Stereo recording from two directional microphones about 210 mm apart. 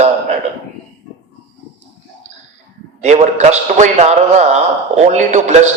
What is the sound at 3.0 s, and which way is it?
A man's voice, 30° right (ahead or behind).